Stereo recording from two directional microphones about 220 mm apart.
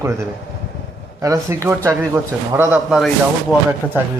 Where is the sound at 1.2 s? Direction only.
15° right (ahead or behind).